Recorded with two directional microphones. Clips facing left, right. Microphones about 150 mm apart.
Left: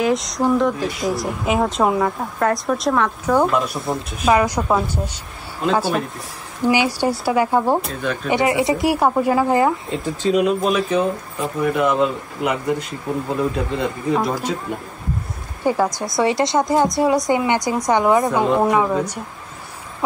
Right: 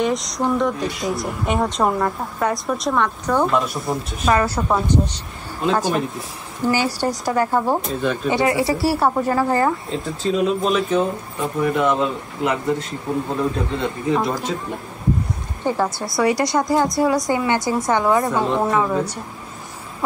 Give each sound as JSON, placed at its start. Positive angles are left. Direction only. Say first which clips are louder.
{"t": 0.0, "sound": "speech", "louder": "left 2 dB", "side_deg": 0}
{"t": 4.4, "sound": "a woman's voice", "louder": "left 2 dB", "side_deg": 10}
{"t": 6.6, "sound": "a woman's voice", "louder": "left 2 dB", "side_deg": 15}
{"t": 8.0, "sound": "speech", "louder": "right 2 dB", "side_deg": -5}
{"t": 8.3, "sound": "speech", "louder": "left 2 dB", "side_deg": 20}
{"t": 15.6, "sound": "a woman's voice", "louder": "left 3 dB", "side_deg": 10}